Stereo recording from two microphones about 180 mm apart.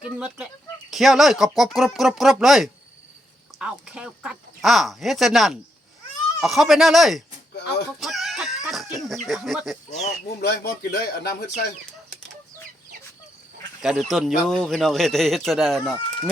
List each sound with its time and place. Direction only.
0.0 s a man's voice: 5° right (ahead or behind)
7.9 s chicken: centre (ahead or behind)
10.2 s speech: 65° left (ahead or behind)
13.8 s a man's voice: centre (ahead or behind)